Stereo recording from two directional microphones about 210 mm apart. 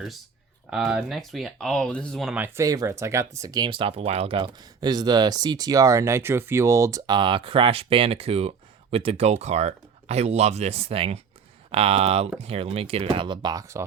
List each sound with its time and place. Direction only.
0.7 s speech: 5° right (ahead or behind)